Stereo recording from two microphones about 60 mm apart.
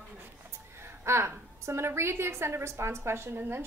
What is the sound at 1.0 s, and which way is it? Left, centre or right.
A woman's voice, right.